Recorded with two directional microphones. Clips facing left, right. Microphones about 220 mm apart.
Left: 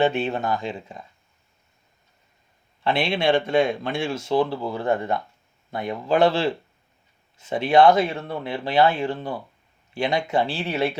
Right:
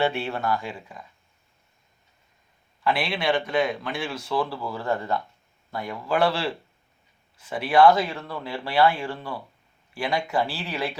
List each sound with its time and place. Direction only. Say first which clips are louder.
0.0 s speech: left 3 dB; 20° left (ahead or behind)
2.8 s speech: left 3 dB; 25° left (ahead or behind)